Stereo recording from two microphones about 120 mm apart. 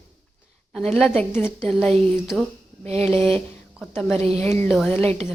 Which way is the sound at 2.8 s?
60° right (ahead or behind).